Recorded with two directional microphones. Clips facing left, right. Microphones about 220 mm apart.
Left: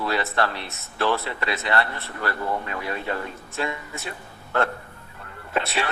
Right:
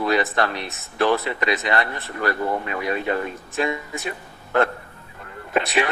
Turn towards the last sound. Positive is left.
turn(degrees=-15)  # may be behind; listen again after turning